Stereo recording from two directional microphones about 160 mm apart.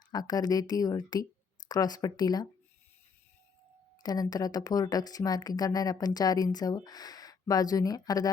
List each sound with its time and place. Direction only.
0.1 s speech: 25° left (ahead or behind)
4.0 s speech: 25° left (ahead or behind)